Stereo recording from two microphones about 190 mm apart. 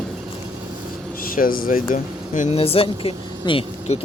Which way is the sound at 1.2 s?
50° left (ahead or behind).